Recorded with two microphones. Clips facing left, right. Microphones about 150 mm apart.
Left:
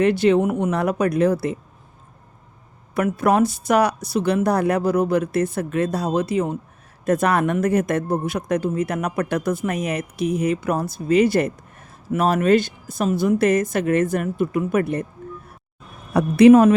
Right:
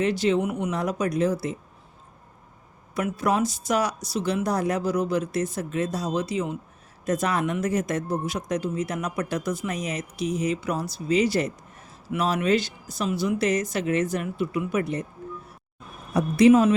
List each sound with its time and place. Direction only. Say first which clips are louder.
0.0 s speech: left 6 dB; 60° left (ahead or behind)
2.9 s speech: left 6 dB; 60° left (ahead or behind)
16.1 s speech: left 6 dB; 60° left (ahead or behind)